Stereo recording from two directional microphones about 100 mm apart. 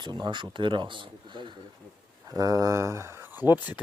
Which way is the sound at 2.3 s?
35° right (ahead or behind).